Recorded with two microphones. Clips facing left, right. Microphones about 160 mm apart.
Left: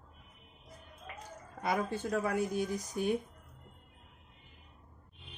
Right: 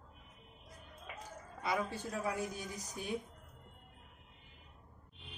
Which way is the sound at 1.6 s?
50° left (ahead or behind).